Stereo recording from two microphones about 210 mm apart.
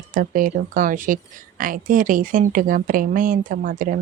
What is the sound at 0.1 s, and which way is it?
Speech, 40° right (ahead or behind).